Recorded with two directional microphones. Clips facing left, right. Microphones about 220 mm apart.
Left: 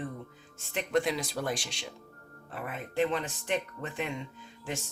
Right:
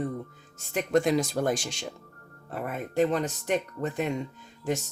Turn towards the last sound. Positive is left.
turn(degrees=-45)  # may be behind; listen again after turning